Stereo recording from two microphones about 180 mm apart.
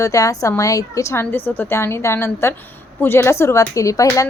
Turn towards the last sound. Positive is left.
turn(degrees=20)  # may be behind; listen again after turning